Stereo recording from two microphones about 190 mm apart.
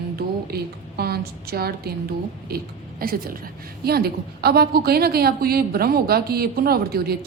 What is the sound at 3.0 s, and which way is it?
A woman's voice, 50° right (ahead or behind).